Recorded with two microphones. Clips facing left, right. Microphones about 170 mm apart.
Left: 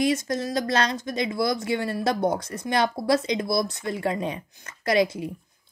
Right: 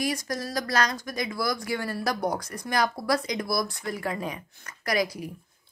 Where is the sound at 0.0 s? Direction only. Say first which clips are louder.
Left 6 dB; 25° left (ahead or behind).